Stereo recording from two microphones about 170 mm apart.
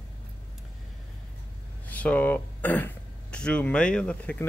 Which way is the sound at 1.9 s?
10° left (ahead or behind).